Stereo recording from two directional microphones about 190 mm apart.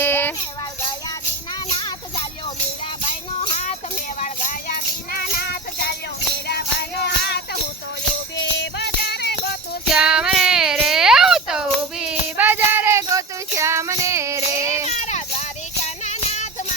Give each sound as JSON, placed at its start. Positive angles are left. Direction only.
{"t": 0.0, "sound": "music", "side_deg": 10}
{"t": 3.1, "sound": "music", "side_deg": 40}
{"t": 7.0, "sound": "music", "side_deg": 60}
{"t": 9.9, "sound": "child singing", "side_deg": -5}
{"t": 14.8, "sound": "a sound", "side_deg": 35}
{"t": 16.0, "sound": "music", "side_deg": 40}